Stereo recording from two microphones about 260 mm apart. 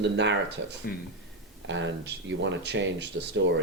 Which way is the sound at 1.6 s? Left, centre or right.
Right.